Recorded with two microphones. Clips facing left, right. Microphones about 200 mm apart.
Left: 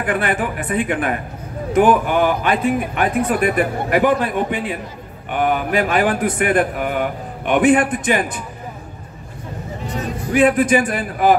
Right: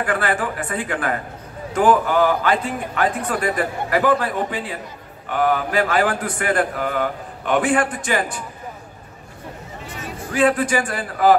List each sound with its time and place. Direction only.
0.0 s a man's voice: 20° left (ahead or behind)
10.3 s a man's voice: 20° left (ahead or behind)